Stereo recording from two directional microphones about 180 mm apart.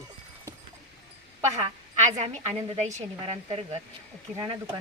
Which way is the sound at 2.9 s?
35° right (ahead or behind).